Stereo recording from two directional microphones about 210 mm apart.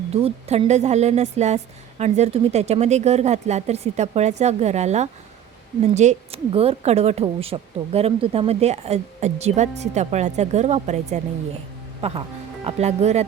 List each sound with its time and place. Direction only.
0.1 s speech: 30° right (ahead or behind)